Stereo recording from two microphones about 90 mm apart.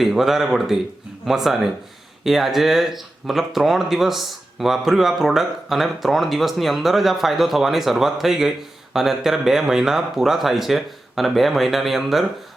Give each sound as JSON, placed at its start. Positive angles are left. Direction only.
{"t": 0.0, "sound": "speech", "side_deg": -5}